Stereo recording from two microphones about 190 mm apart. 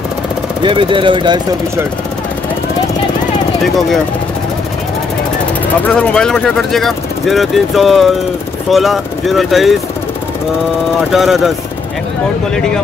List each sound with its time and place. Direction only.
0.7 s speech: 25° right (ahead or behind)
5.9 s speech: 5° left (ahead or behind)
11.1 s speech: centre (ahead or behind)